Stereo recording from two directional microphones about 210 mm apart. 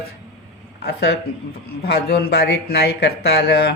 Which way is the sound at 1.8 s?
50° left (ahead or behind).